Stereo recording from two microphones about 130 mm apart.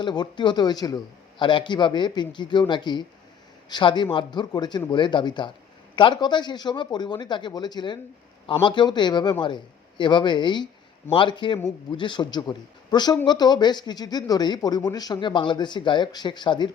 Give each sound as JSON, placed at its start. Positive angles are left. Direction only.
{"t": 0.0, "sound": "speech", "side_deg": 35}